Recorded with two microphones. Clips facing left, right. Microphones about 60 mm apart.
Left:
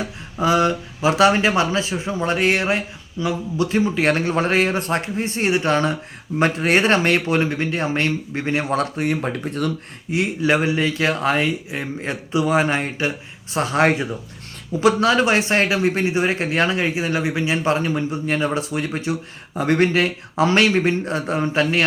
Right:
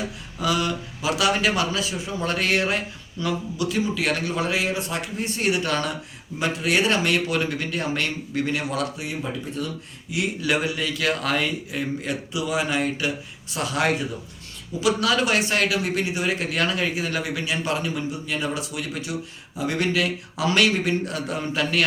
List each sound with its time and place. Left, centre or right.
0.0 s speech: left
3.6 s speech: left
9.0 s speech: left
10.1 s speech: left